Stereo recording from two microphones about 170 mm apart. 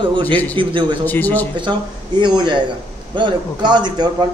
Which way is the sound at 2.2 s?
30° right (ahead or behind).